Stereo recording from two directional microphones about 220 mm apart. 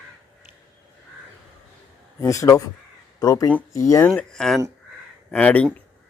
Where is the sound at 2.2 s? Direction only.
15° left (ahead or behind).